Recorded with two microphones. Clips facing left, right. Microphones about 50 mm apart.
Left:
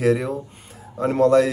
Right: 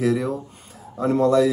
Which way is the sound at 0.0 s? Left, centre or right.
Left.